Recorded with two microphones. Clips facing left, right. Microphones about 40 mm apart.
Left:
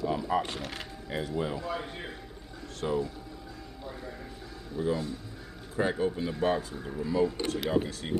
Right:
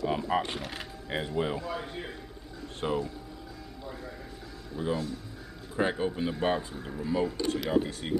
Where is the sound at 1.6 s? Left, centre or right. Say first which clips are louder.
Even; centre.